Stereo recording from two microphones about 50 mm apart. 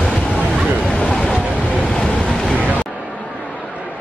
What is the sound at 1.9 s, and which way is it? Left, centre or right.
Vehicle, centre.